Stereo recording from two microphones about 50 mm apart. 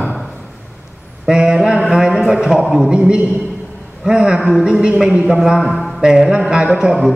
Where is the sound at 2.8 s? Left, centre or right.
Centre.